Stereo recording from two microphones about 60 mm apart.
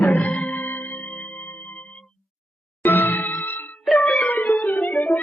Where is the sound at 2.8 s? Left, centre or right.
Left.